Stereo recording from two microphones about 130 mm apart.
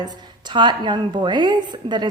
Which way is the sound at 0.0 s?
35° right (ahead or behind).